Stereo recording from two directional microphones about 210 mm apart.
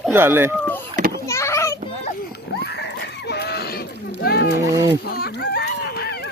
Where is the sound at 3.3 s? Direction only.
50° left (ahead or behind).